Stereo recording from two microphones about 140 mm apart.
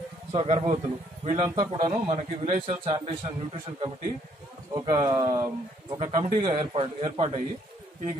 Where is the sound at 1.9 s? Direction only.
60° right (ahead or behind).